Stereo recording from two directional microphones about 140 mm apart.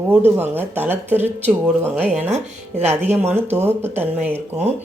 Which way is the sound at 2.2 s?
50° right (ahead or behind).